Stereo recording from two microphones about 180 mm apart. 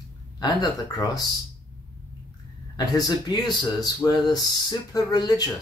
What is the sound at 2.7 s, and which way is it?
Speech, 20° left (ahead or behind).